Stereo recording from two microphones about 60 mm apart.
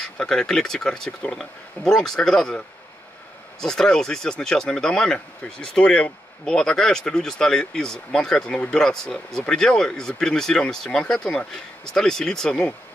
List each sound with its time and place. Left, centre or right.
0.0 s speech: centre
3.6 s speech: centre